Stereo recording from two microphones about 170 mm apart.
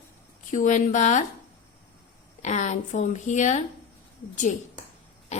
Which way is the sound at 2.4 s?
45° left (ahead or behind).